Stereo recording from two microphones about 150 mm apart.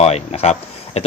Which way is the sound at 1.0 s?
45° left (ahead or behind).